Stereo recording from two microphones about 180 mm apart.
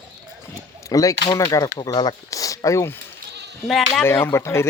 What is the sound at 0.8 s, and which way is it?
Speech, 20° left (ahead or behind).